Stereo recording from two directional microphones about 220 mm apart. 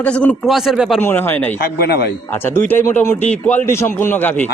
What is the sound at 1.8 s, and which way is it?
Speech, 45° left (ahead or behind).